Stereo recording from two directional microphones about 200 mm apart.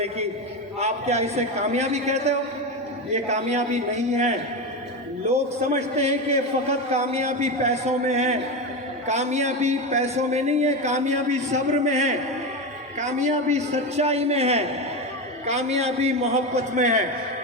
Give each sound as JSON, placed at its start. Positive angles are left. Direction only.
{"t": 0.8, "sound": "a man's voice", "side_deg": -35}
{"t": 5.7, "sound": "a man's voice", "side_deg": -35}